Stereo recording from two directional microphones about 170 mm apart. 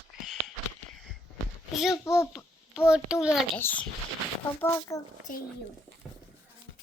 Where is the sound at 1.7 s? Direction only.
Centre (ahead or behind).